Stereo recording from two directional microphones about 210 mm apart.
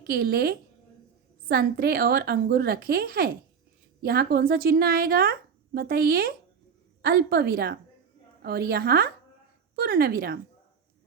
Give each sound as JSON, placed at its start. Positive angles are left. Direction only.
{"t": 0.1, "sound": "a woman's voice", "side_deg": -50}